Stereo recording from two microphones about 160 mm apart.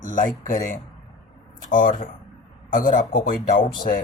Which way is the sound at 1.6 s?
55° left (ahead or behind).